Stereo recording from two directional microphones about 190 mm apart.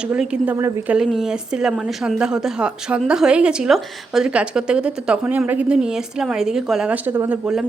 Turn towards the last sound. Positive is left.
turn(degrees=-5)  # may be behind; listen again after turning